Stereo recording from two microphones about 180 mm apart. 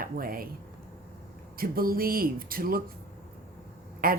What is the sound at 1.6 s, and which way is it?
Speech, 55° right (ahead or behind).